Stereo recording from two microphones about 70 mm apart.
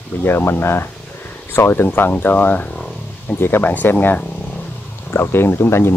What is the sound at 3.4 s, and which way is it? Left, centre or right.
Wild animals, left.